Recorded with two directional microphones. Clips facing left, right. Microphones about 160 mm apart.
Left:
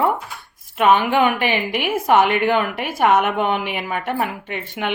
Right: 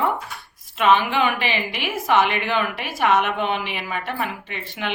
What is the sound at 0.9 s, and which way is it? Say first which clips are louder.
Speech: left 4 dB; 50° left (ahead or behind).